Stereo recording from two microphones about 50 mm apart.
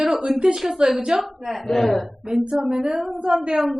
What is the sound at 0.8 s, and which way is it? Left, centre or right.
A woman's voice, centre.